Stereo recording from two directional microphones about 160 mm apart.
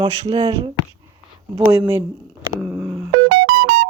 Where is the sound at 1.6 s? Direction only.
15° right (ahead or behind).